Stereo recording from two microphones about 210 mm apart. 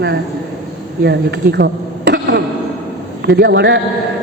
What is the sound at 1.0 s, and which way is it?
Speech, 55° right (ahead or behind).